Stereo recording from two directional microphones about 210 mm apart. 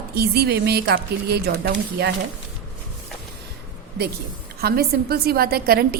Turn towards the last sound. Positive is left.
turn(degrees=-45)  # may be behind; listen again after turning